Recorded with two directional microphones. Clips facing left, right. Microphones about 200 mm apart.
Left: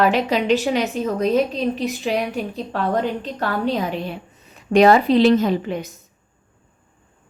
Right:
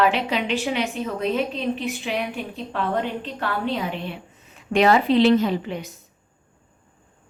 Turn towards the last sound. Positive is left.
turn(degrees=45)  # may be behind; listen again after turning